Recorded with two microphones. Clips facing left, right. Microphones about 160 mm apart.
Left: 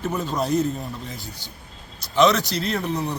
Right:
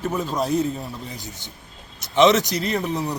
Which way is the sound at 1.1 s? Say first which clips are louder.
Right 1 dB; 20° right (ahead or behind).